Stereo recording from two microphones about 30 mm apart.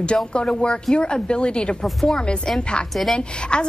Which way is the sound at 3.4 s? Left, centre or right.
Left.